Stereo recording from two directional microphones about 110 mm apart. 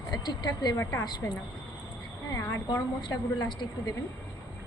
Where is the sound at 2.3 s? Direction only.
25° left (ahead or behind).